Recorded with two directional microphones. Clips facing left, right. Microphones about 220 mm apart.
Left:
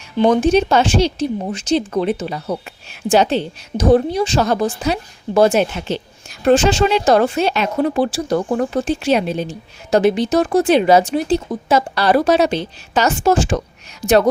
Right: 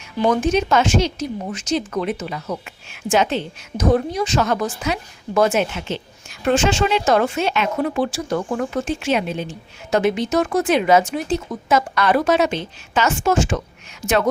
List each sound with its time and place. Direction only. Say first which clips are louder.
0.2 s speech: left 5 dB; 30° left (ahead or behind)